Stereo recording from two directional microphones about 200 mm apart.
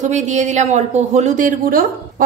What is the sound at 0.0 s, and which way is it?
Speech, 35° right (ahead or behind).